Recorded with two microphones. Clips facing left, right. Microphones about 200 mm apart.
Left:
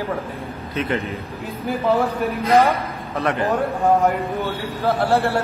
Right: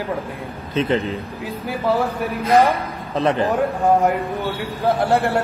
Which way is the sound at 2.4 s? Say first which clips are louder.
Right 1 dB; 15° right (ahead or behind).